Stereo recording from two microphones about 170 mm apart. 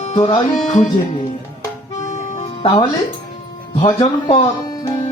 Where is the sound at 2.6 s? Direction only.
25° left (ahead or behind).